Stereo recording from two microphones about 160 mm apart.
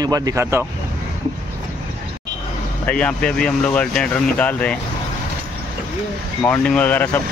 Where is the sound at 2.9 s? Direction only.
5° left (ahead or behind).